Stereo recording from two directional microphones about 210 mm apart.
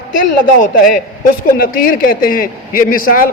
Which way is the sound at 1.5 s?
40° left (ahead or behind).